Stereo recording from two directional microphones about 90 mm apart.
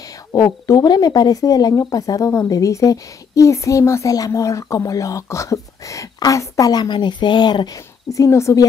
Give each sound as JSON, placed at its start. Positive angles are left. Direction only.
{"t": 0.3, "sound": "a woman's voice", "side_deg": 35}
{"t": 0.8, "sound": "a woman's voice", "side_deg": 50}
{"t": 8.1, "sound": "a woman's voice", "side_deg": 35}